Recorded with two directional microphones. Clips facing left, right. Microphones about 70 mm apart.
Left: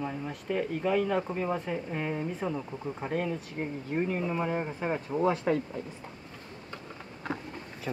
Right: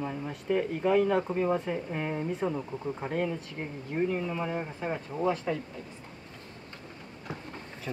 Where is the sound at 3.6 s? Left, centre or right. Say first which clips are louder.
Even; centre.